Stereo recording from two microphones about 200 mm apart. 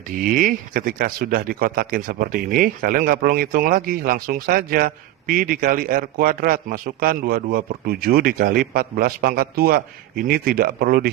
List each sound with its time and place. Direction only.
0.1 s speech: 45° right (ahead or behind)